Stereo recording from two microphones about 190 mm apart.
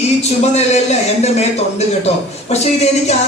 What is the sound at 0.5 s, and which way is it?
Speech, 35° left (ahead or behind).